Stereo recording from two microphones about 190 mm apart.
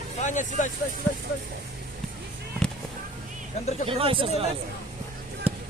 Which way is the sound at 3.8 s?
30° right (ahead or behind).